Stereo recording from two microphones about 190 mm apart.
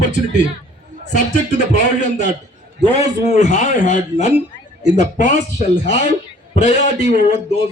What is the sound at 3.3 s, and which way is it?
A man's voice, 40° left (ahead or behind).